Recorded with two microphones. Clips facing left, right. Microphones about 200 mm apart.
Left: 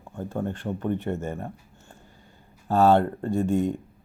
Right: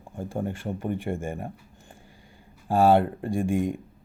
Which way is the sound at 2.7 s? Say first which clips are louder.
Even; 10° right (ahead or behind).